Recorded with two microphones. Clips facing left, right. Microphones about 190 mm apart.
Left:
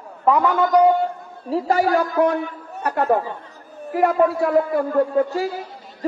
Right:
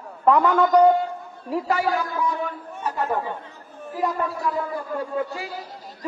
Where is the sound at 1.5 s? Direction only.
40° left (ahead or behind).